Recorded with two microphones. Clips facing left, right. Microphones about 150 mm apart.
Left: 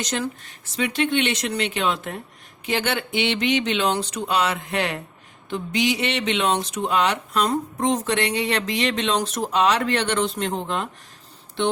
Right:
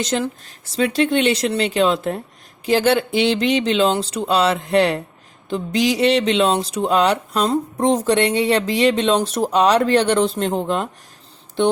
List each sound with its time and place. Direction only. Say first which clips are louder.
0.9 s speech: right 5 dB; 40° right (ahead or behind)